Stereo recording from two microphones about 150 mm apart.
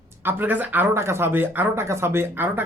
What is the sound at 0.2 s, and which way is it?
Speech, 15° right (ahead or behind).